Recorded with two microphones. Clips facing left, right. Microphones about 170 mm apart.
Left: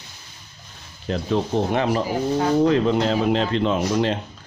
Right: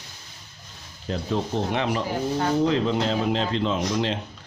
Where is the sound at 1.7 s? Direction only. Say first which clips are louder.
Left 4 dB; 45° left (ahead or behind).